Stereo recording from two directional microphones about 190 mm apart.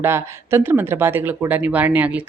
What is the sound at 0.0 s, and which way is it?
Speech, 10° right (ahead or behind).